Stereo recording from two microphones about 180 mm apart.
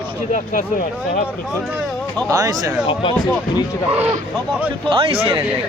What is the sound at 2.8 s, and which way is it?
Speech, 25° left (ahead or behind).